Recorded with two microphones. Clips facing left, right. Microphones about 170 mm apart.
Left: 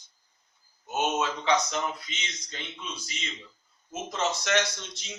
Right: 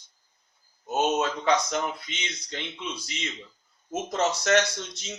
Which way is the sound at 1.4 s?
55° right (ahead or behind).